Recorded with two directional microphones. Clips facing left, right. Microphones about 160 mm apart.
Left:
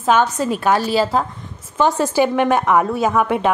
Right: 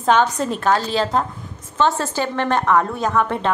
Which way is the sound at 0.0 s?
5° left (ahead or behind).